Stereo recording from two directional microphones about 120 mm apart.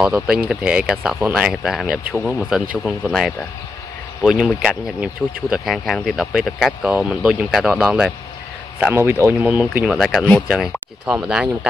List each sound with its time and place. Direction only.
0.0 s speech: 5° right (ahead or behind)
3.0 s speech: centre (ahead or behind); by 9.5 s 20° right (ahead or behind)
9.5 s speech: 5° right (ahead or behind)
10.5 s speech: 5° right (ahead or behind)